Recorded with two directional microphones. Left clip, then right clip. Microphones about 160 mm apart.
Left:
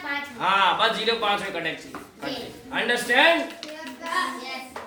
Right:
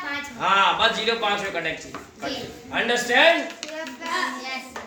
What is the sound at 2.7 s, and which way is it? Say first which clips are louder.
Speech: right 2 dB; 20° right (ahead or behind).